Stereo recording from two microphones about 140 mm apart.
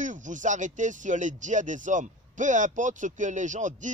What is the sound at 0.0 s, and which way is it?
Speech, 65° right (ahead or behind).